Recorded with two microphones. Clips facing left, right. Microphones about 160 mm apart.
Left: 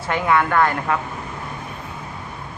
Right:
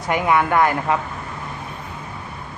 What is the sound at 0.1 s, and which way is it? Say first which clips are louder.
Speech: right 1 dB; 15° right (ahead or behind).